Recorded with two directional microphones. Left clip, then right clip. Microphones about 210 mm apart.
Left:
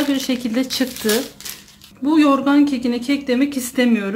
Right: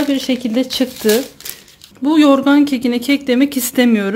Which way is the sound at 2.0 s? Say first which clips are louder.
Right 4 dB; 40° right (ahead or behind).